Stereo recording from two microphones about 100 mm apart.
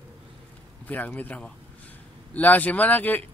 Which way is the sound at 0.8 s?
15° left (ahead or behind).